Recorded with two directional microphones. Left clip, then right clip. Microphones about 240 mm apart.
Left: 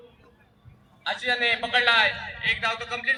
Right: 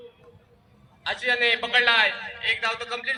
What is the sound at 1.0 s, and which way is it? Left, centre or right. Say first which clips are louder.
A man's voice: right 2 dB; right.